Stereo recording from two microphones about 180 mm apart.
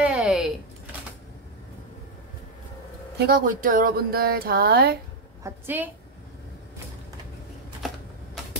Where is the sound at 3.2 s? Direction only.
55° right (ahead or behind).